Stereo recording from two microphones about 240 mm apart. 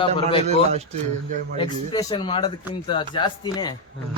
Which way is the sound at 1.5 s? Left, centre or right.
Centre.